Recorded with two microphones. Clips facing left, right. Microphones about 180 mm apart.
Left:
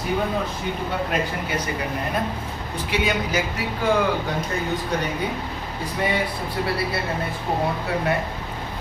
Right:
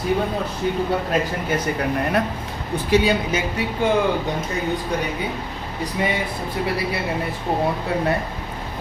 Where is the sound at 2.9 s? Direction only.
35° right (ahead or behind).